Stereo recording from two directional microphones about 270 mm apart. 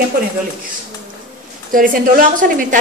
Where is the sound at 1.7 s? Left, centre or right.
Right.